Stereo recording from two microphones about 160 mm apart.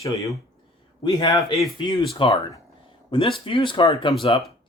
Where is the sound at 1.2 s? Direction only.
30° left (ahead or behind).